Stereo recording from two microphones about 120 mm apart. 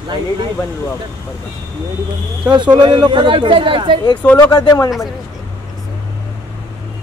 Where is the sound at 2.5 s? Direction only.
40° right (ahead or behind).